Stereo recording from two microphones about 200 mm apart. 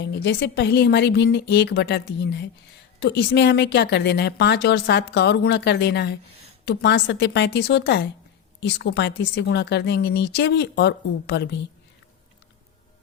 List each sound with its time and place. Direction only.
0.1 s a woman's voice: 55° left (ahead or behind)